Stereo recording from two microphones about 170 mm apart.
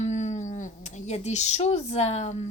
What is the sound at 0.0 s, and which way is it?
Speech, 45° left (ahead or behind).